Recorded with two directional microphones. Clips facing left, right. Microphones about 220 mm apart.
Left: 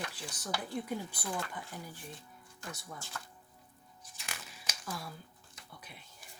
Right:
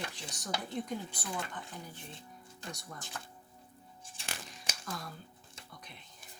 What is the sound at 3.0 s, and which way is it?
Speech, 20° right (ahead or behind).